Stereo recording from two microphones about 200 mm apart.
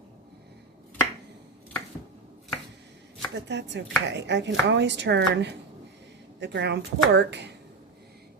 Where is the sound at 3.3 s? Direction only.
60° right (ahead or behind).